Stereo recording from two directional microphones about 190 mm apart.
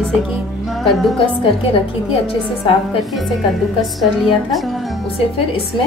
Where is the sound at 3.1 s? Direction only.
Centre (ahead or behind).